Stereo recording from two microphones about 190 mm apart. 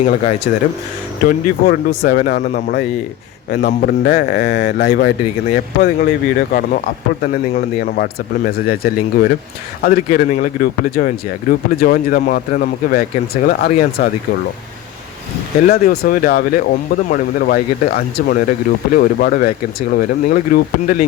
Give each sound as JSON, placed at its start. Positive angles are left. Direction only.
{"t": 0.0, "sound": "speech", "side_deg": 35}
{"t": 1.2, "sound": "speech", "side_deg": 50}
{"t": 15.6, "sound": "speech", "side_deg": 50}